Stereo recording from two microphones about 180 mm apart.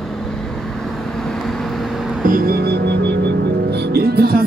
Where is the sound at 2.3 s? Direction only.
55° right (ahead or behind).